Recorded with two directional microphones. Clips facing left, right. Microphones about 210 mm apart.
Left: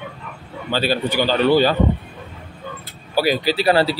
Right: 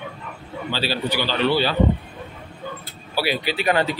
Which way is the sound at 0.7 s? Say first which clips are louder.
Left 5 dB; 50° left (ahead or behind).